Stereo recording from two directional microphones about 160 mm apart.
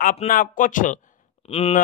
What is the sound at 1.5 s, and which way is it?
Speech, 40° left (ahead or behind).